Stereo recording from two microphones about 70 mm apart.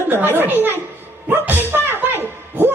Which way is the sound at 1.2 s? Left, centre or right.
Right.